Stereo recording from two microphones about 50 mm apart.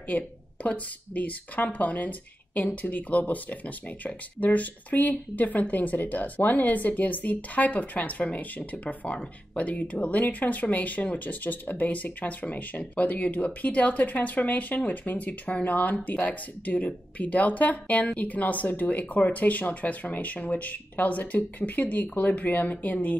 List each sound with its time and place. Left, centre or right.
0.1 s speech: left